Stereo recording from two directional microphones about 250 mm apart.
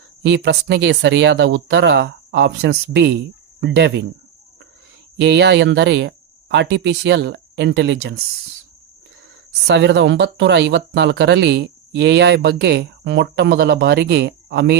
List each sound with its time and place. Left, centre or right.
0.2 s speech: right
5.1 s speech: right
9.6 s speech: right